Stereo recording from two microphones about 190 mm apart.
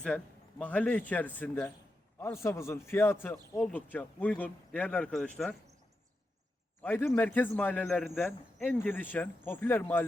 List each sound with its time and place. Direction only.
0.6 s a man's voice: 10° left (ahead or behind)
6.8 s a man's voice: 10° left (ahead or behind)